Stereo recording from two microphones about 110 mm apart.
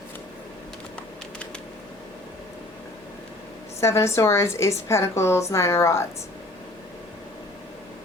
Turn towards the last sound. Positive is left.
turn(degrees=25)  # may be behind; listen again after turning